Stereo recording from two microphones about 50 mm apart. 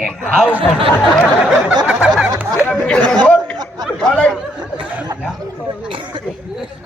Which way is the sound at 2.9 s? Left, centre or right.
Centre.